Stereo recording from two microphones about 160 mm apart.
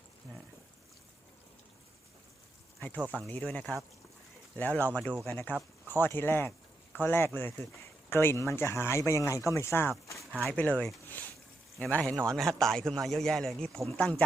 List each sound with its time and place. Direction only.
3.0 s speech: 10° right (ahead or behind)
3.2 s speech: 10° left (ahead or behind)
10.4 s speech: 5° left (ahead or behind)
12.1 s a man's voice: 20° right (ahead or behind)
12.4 s speech: 5° left (ahead or behind)